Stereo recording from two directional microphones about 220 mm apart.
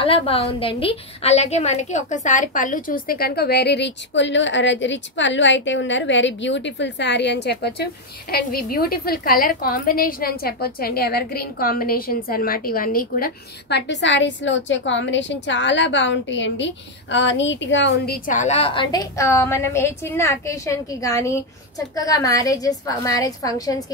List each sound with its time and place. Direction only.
0.0 s a woman's voice: 25° left (ahead or behind)